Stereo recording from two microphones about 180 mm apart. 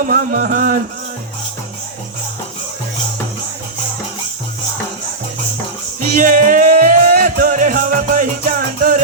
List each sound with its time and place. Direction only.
0.0 s speech: 50° right (ahead or behind)
6.1 s music: 50° right (ahead or behind)